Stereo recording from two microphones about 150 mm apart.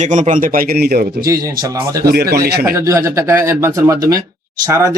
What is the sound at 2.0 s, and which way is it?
Speech, 90° right.